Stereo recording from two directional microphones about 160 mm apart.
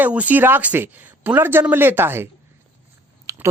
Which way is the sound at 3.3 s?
20° right (ahead or behind).